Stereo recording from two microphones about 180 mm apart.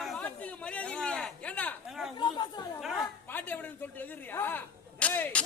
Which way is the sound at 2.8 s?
Centre (ahead or behind).